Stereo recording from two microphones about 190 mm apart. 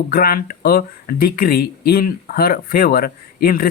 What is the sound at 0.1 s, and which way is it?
Speech, 50° left (ahead or behind).